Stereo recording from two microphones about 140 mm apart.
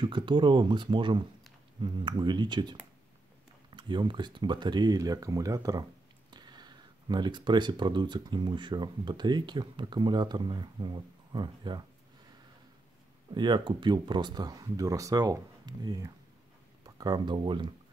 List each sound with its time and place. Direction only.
0.0 s speech: 35° right (ahead or behind)
13.3 s speech: 35° right (ahead or behind)